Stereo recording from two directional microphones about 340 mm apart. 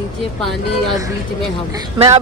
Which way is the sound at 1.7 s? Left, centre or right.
Centre.